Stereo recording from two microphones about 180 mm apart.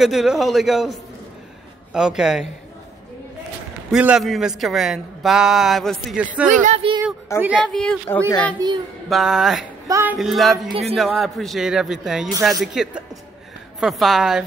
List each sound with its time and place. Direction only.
0.0 s speech: centre (ahead or behind)
3.9 s speech: 5° right (ahead or behind)
6.4 s speech: 45° right (ahead or behind)
7.5 s speech: 5° left (ahead or behind)
8.6 s a child's voice: 20° right (ahead or behind)
9.1 s speech: centre (ahead or behind)
9.8 s music: 15° right (ahead or behind)
10.1 s speech: centre (ahead or behind)
10.7 s speech: 35° right (ahead or behind)
11.0 s speech: centre (ahead or behind)